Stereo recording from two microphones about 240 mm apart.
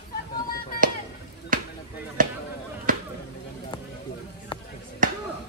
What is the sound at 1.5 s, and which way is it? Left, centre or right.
Basketball bounce, right.